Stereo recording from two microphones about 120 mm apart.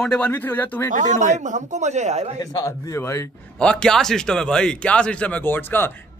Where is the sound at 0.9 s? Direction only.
90° right; by 2.3 s 70° right (ahead or behind).